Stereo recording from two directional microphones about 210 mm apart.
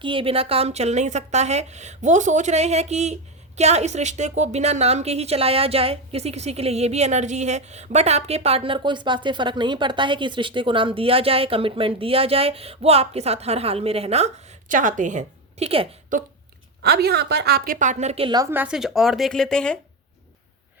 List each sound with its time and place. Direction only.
0.0 s a woman's voice: 25° right (ahead or behind)
16.8 s a woman's voice: 50° right (ahead or behind); by 18.4 s 25° right (ahead or behind)
18.5 s a woman's voice: 5° right (ahead or behind)